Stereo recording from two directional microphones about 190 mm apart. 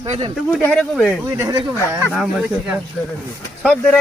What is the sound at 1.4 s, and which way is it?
Speech, 20° right (ahead or behind).